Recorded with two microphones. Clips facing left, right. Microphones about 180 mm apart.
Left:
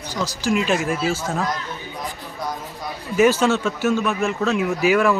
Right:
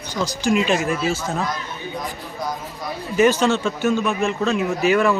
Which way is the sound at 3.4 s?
5° left (ahead or behind).